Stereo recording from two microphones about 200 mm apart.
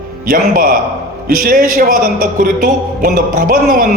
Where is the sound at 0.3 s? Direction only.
45° right (ahead or behind).